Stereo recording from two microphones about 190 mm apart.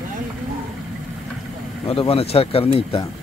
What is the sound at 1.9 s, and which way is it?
Speech, 30° left (ahead or behind).